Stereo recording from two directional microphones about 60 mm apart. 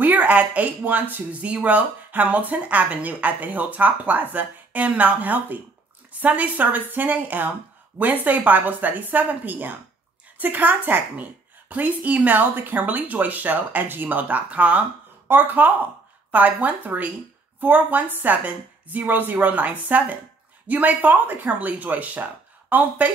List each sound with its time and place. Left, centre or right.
0.0 s a woman's voice: right